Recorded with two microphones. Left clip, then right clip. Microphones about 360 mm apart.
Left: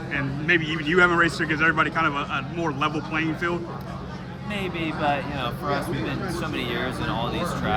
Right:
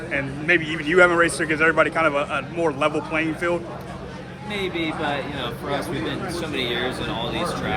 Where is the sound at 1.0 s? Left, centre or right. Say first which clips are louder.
Right 3 dB; centre.